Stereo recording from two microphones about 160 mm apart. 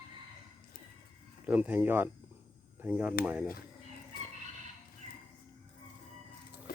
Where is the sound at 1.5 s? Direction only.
10° right (ahead or behind).